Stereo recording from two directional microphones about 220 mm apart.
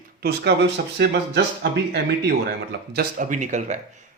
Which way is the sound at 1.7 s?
45° right (ahead or behind).